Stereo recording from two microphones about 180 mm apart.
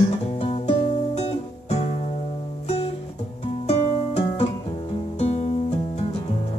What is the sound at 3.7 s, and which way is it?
Music, 35° left (ahead or behind).